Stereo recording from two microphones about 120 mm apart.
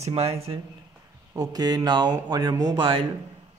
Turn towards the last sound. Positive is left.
turn(degrees=-40)  # may be behind; listen again after turning